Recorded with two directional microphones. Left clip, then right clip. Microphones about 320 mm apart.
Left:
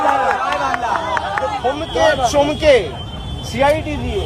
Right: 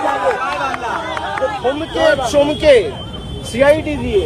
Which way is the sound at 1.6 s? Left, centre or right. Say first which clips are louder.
Right 1 dB; centre.